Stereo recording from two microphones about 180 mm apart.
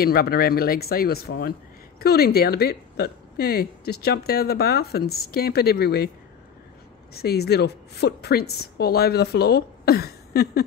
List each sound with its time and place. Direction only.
0.0 s speech: 60° left (ahead or behind)
7.2 s speech: 60° left (ahead or behind)